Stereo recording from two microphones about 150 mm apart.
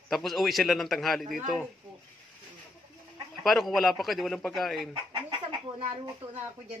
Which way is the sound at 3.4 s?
Centre (ahead or behind).